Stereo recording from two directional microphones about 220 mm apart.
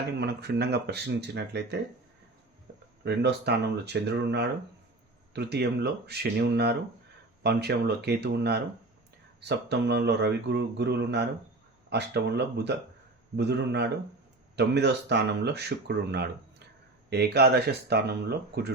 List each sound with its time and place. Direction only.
0.2 s speech: 50° right (ahead or behind)
3.0 s speech: 50° right (ahead or behind)